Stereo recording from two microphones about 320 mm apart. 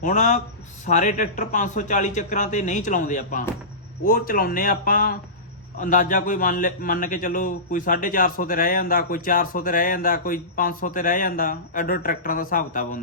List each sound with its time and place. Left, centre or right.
0.0 s a man's voice: left